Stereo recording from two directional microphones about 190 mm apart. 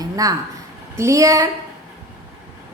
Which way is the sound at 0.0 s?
20° right (ahead or behind).